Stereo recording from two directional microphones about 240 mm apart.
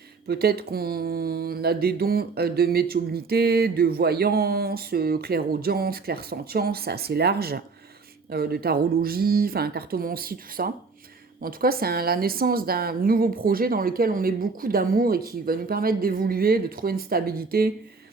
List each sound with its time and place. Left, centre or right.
0.3 s mantra: right